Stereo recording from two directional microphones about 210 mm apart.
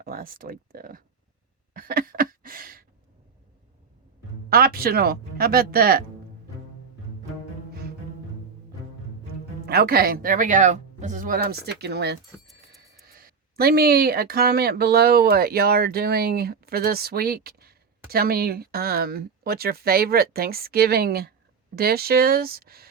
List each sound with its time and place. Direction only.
0.0 s speech: 40° right (ahead or behind)
1.7 s a sound: 45° right (ahead or behind)
4.4 s speech: 45° right (ahead or behind)
9.6 s speech: 45° right (ahead or behind)